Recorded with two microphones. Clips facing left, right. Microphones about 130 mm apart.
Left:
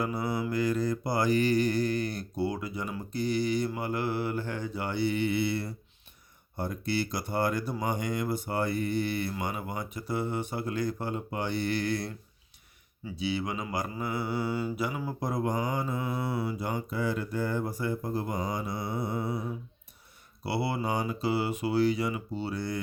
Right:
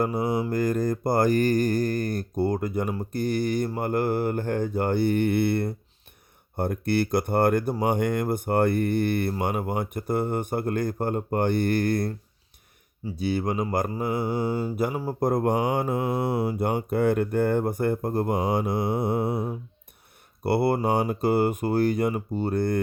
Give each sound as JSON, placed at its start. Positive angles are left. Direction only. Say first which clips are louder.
{"t": 0.0, "sound": "mantra", "louder": "right 6 dB", "side_deg": -45}
{"t": 6.6, "sound": "speech", "louder": "right 6 dB", "side_deg": -55}
{"t": 9.4, "sound": "mantra", "louder": "right 7 dB", "side_deg": -55}
{"t": 20.4, "sound": "mantra", "louder": "right 8 dB", "side_deg": -55}